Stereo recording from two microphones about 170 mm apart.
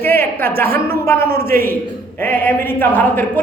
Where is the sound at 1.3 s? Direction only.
60° right (ahead or behind).